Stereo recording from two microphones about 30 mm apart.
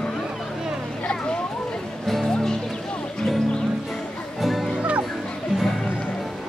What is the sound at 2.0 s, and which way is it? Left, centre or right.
Music, centre.